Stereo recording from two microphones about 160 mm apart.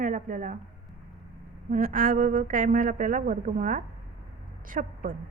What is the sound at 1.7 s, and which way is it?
A woman's voice, 55° right (ahead or behind).